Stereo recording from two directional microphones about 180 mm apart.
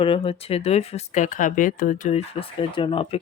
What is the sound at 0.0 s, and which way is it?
Speech, 30° left (ahead or behind).